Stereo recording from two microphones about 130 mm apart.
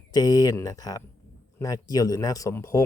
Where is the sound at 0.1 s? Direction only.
30° left (ahead or behind).